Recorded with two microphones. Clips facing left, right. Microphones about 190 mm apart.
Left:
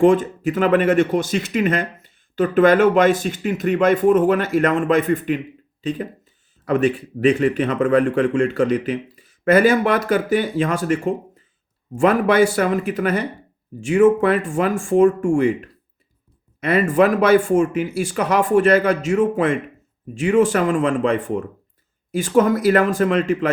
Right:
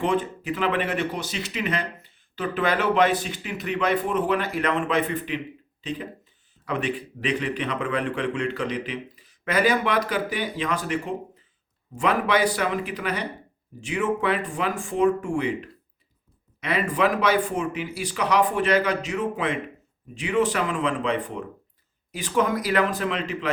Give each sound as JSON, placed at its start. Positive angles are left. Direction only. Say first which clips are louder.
{"t": 0.0, "sound": "speech", "louder": "left 10 dB", "side_deg": 45}
{"t": 16.6, "sound": "speech", "louder": "left 8 dB", "side_deg": 50}